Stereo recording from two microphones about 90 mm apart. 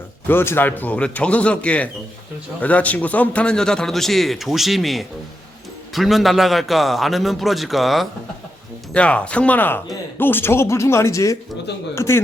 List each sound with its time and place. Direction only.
0.3 s a man's voice: 25° left (ahead or behind); by 8.0 s centre (ahead or behind)
8.9 s speech: 15° left (ahead or behind); by 12.2 s 30° left (ahead or behind)